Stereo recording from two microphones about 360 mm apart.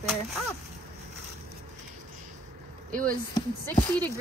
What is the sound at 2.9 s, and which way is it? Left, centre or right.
Speech, right.